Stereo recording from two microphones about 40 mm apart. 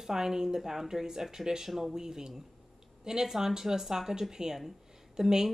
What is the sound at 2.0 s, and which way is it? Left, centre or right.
A woman's voice, centre.